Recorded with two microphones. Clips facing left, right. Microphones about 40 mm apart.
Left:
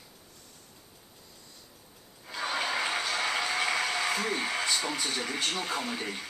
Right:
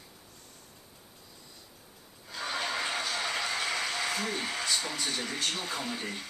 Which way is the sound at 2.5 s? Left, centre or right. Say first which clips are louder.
Left 2 dB; centre.